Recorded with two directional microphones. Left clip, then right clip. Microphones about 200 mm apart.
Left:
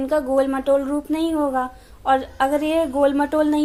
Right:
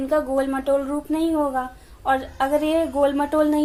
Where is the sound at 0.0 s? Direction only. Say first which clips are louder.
Left 2 dB; 20° left (ahead or behind).